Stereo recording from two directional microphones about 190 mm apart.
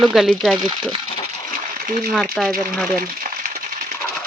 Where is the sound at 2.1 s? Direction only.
Centre (ahead or behind).